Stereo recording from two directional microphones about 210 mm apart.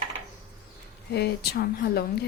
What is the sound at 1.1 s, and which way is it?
Speech, 50° left (ahead or behind).